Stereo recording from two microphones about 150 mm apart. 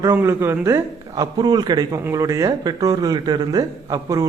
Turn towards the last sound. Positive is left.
turn(degrees=-25)  # may be behind; listen again after turning